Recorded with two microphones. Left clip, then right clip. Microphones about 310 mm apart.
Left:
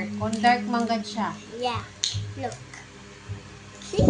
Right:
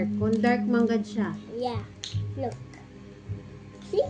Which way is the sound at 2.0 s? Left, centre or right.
Centre.